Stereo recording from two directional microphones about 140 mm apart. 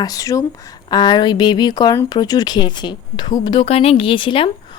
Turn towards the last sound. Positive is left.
turn(degrees=35)  # may be behind; listen again after turning